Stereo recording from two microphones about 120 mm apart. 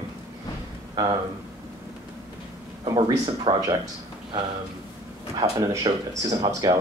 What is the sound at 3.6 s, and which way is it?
Speech, 30° right (ahead or behind).